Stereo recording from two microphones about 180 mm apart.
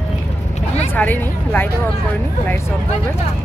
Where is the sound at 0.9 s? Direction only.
10° left (ahead or behind).